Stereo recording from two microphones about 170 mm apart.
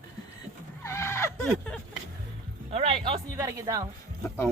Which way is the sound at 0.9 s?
15° left (ahead or behind).